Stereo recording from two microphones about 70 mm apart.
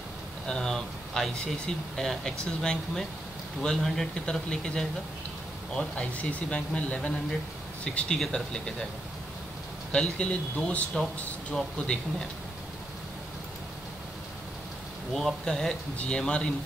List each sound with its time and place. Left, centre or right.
0.5 s speech: centre
9.9 s speech: centre
15.1 s speech: centre